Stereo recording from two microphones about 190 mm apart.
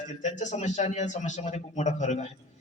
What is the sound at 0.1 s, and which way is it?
A man's voice, 40° left (ahead or behind).